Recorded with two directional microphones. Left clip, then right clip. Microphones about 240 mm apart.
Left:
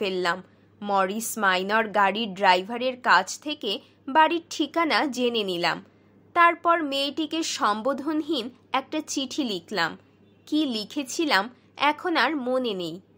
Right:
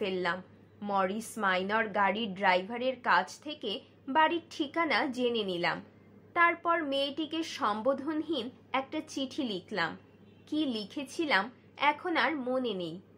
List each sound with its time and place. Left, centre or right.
0.0 s a woman's voice: left